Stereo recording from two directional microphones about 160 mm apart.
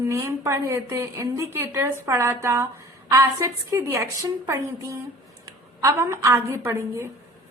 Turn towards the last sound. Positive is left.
turn(degrees=-15)  # may be behind; listen again after turning